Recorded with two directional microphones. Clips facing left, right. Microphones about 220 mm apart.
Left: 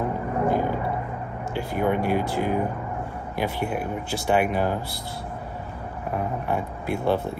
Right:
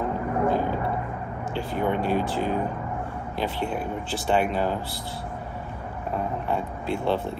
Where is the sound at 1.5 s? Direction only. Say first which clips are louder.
Left 2 dB; 10° left (ahead or behind).